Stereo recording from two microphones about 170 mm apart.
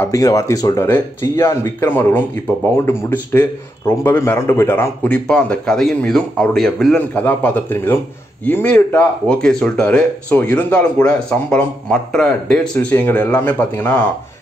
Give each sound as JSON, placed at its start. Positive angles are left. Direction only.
{"t": 0.0, "sound": "speech", "side_deg": 20}